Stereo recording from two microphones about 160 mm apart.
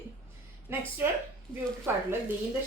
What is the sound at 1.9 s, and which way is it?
Speech, 15° right (ahead or behind).